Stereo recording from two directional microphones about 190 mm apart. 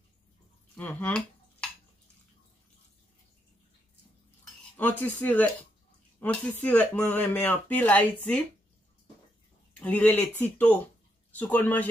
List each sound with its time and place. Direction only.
0.7 s a sound: 10° left (ahead or behind)
4.7 s speech: 10° left (ahead or behind)
9.8 s speech: 5° left (ahead or behind)